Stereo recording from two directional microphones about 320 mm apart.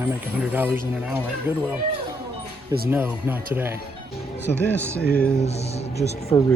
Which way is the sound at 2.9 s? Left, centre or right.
Centre.